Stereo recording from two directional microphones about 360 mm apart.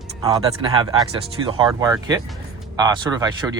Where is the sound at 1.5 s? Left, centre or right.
Centre.